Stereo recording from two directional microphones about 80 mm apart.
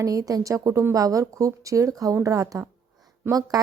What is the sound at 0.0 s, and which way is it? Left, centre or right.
A woman's voice, right.